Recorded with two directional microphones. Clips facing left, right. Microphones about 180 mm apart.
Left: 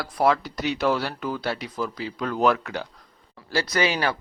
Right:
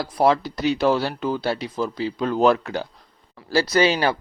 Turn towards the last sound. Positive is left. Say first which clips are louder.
# right 5 dB
turn(degrees=-30)  # may be behind; listen again after turning